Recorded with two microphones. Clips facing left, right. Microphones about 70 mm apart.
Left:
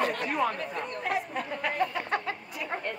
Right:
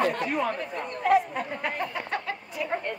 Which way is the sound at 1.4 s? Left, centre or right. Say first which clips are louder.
Left 1 dB; centre.